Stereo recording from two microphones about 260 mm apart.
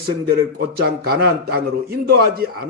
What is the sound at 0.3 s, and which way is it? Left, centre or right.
A man's voice, right.